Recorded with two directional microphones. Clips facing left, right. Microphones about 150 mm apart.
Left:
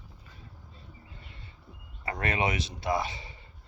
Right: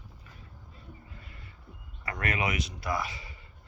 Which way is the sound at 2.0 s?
30° left (ahead or behind).